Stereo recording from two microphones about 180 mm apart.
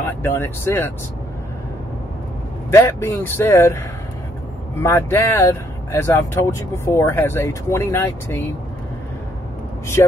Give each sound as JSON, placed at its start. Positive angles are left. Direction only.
{"t": 0.2, "sound": "speech", "side_deg": 15}
{"t": 2.7, "sound": "speech", "side_deg": 15}
{"t": 4.8, "sound": "speech", "side_deg": 15}
{"t": 10.0, "sound": "speech", "side_deg": 15}